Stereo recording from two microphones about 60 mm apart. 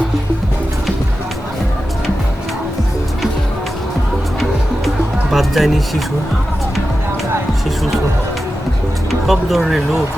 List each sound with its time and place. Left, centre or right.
5.3 s music: centre
9.0 s speech: centre